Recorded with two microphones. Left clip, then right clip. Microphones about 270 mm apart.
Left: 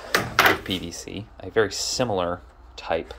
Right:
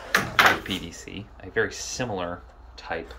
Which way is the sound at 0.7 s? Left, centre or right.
Centre.